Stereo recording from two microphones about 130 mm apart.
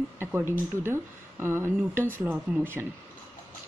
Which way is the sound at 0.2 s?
15° right (ahead or behind).